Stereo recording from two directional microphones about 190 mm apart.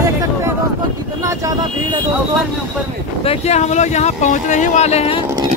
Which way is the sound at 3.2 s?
35° left (ahead or behind).